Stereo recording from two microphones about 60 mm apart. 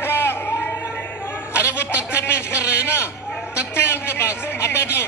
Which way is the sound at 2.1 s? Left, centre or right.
Left.